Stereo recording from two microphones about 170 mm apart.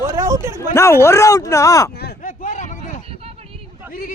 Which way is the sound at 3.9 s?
55° left (ahead or behind).